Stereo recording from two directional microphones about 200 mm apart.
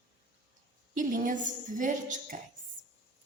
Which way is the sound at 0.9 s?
40° right (ahead or behind).